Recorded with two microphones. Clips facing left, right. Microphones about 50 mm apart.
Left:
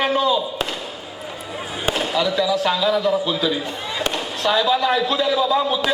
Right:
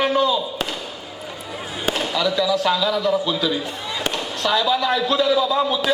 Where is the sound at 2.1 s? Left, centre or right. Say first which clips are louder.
Even; centre.